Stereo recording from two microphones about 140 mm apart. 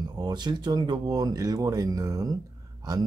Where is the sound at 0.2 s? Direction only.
30° right (ahead or behind).